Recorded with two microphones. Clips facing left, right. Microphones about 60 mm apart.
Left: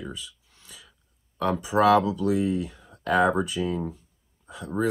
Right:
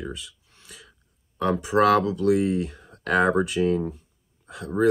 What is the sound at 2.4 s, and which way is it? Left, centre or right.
Speech, right.